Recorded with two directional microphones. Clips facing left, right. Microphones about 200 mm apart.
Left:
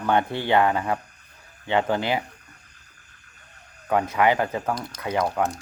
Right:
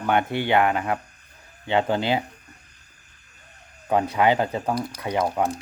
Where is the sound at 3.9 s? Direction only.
25° right (ahead or behind).